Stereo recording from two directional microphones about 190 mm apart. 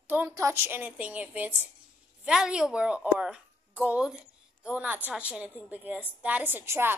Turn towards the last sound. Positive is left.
turn(degrees=-10)  # may be behind; listen again after turning